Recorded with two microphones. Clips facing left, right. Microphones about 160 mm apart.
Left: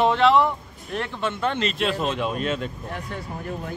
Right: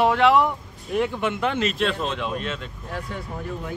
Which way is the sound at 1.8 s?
5° left (ahead or behind).